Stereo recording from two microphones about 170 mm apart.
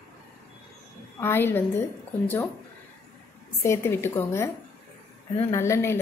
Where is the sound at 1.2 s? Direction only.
10° left (ahead or behind).